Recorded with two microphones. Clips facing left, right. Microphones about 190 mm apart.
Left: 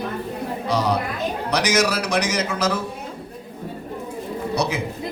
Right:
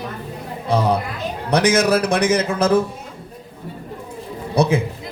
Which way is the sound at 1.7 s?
55° right (ahead or behind).